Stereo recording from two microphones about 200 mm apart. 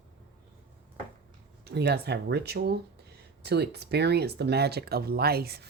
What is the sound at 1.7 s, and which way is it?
Speech, 55° right (ahead or behind).